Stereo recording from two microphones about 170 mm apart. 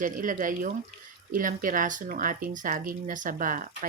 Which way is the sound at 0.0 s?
50° right (ahead or behind).